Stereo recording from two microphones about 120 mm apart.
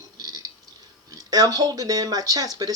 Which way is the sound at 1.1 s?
30° right (ahead or behind).